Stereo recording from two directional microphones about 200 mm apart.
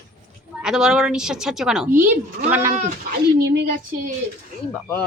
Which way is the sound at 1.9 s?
40° right (ahead or behind).